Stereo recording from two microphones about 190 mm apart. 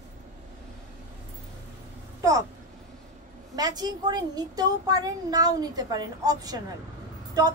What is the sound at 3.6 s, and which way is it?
A child's voice, 20° right (ahead or behind).